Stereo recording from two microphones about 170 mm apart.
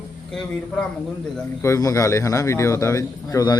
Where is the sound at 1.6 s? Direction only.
20° left (ahead or behind).